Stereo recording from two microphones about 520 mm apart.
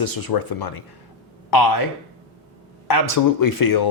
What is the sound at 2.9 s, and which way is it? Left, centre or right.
Speech, left.